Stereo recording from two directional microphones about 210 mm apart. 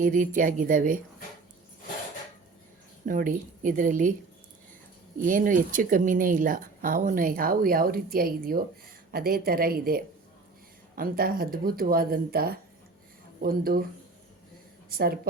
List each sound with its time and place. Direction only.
0.0 s speech: 40° right (ahead or behind)
3.1 s speech: 40° right (ahead or behind)
5.1 s speech: 40° right (ahead or behind)
14.8 s a woman's voice: 45° right (ahead or behind)